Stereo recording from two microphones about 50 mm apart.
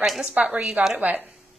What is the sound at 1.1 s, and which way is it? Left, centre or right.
Speech, right.